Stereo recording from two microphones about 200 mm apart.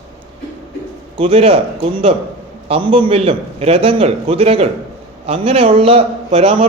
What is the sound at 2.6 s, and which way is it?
Speech, 25° right (ahead or behind).